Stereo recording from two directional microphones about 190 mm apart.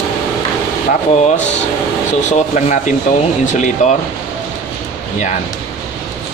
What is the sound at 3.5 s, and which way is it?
Speech, 40° left (ahead or behind).